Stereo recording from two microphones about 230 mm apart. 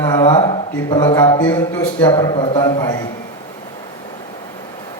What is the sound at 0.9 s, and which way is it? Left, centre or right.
A man's voice, centre.